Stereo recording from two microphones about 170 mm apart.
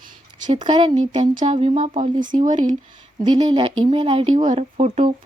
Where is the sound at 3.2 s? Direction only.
25° right (ahead or behind).